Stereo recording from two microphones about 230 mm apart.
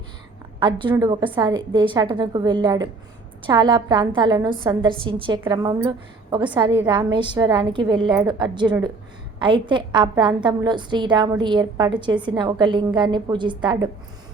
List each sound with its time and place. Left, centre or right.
0.6 s a woman's voice: right